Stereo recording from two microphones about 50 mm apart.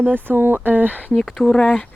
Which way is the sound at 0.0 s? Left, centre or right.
Right.